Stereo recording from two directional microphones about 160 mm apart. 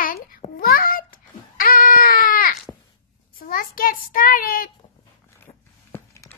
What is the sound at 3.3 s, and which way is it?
A child's voice, 60° left (ahead or behind).